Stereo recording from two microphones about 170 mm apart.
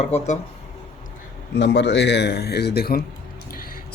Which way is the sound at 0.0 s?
40° left (ahead or behind).